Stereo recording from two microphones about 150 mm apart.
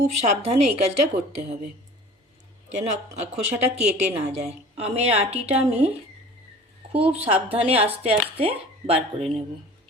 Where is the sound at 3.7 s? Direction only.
45° right (ahead or behind).